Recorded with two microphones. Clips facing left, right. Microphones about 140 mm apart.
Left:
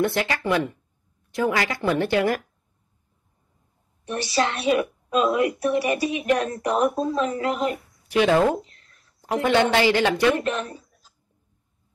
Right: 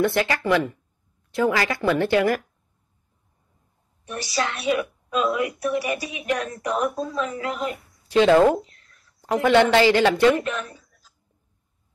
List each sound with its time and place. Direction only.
0.0 s speech: 20° left (ahead or behind)
4.0 s a woman's voice: 30° left (ahead or behind)
8.2 s speech: 20° right (ahead or behind)
8.6 s a sound: 30° left (ahead or behind)
9.4 s speech: 20° left (ahead or behind)
10.3 s speech: 30° left (ahead or behind)